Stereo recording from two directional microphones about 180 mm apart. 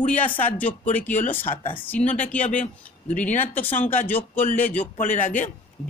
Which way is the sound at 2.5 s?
45° left (ahead or behind).